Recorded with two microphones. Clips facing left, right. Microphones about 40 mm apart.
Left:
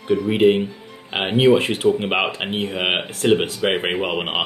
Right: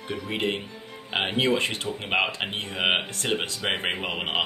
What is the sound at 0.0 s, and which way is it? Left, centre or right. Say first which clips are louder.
Speech: left 12 dB; centre.